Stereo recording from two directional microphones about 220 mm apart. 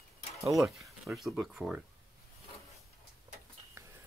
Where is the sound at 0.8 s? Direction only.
Centre (ahead or behind).